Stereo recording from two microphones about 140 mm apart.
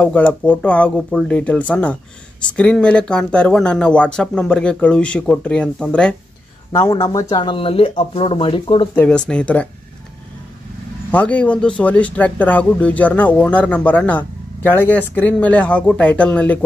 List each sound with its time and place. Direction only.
0.0 s speech: 10° left (ahead or behind)
6.8 s speech: 25° left (ahead or behind)
8.9 s speech: 10° left (ahead or behind)
11.1 s speech: 10° left (ahead or behind)